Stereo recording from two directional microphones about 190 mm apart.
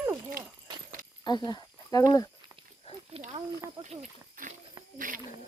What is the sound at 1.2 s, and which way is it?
Speech, 25° left (ahead or behind).